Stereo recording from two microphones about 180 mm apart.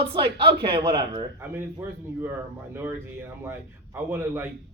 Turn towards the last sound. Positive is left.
turn(degrees=-10)  # may be behind; listen again after turning